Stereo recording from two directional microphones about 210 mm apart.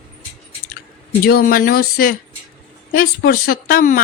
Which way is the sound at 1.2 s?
45° left (ahead or behind).